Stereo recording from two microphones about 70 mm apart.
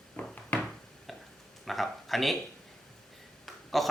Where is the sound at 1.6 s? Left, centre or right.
Centre.